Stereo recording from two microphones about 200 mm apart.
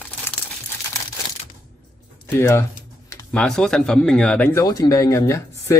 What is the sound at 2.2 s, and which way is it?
Speech, 15° left (ahead or behind).